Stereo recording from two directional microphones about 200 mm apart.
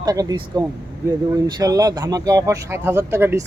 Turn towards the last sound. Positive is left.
turn(degrees=-10)  # may be behind; listen again after turning